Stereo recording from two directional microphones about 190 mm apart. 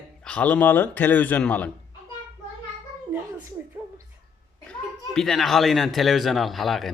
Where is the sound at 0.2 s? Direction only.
5° left (ahead or behind).